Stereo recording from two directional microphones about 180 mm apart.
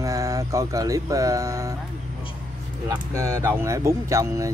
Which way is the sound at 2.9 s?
20° right (ahead or behind).